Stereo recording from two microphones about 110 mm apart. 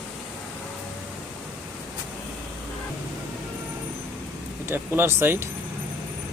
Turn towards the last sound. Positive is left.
turn(degrees=-20)  # may be behind; listen again after turning